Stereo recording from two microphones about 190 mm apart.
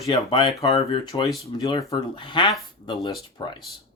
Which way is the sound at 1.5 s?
25° left (ahead or behind).